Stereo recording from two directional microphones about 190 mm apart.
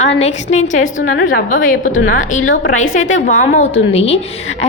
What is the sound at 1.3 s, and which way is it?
Speech, 45° left (ahead or behind).